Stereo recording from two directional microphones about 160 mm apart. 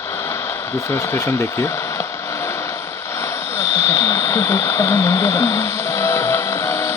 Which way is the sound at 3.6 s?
15° left (ahead or behind).